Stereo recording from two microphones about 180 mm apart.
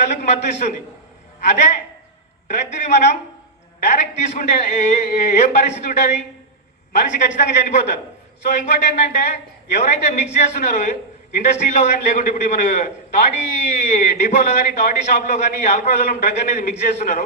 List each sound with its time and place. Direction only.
0.1 s a man's voice: 40° left (ahead or behind)
1.5 s a man's voice: 40° left (ahead or behind)
7.1 s a man's voice: 45° left (ahead or behind)